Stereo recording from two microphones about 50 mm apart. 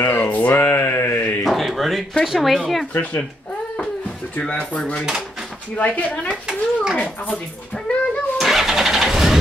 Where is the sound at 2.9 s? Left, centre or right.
Left.